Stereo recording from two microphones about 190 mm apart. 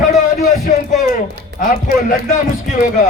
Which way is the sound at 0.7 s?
45° left (ahead or behind).